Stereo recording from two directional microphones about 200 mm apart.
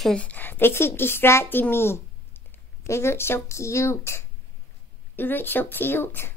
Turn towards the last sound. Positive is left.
turn(degrees=10)  # may be behind; listen again after turning